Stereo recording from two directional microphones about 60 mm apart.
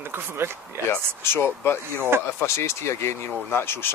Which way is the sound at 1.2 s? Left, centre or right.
Left.